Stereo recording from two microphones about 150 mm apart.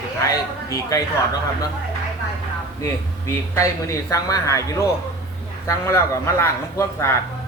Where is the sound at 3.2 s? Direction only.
20° left (ahead or behind).